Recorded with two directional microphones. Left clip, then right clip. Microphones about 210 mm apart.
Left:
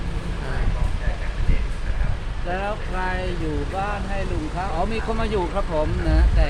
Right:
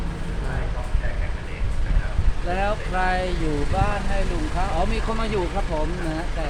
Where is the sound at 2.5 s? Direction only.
55° right (ahead or behind).